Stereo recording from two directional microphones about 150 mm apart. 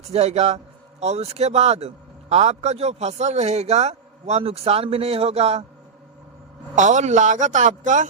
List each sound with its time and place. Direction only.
0.1 s a man's voice: 45° right (ahead or behind)
6.7 s a man's voice: 55° right (ahead or behind)